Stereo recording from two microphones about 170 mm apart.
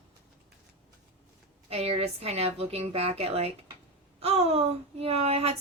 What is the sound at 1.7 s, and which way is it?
A woman's voice, 35° right (ahead or behind).